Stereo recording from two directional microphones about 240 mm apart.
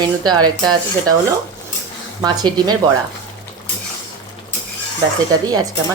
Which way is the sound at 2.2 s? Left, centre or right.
Centre.